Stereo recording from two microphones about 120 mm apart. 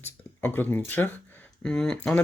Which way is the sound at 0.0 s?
15° left (ahead or behind).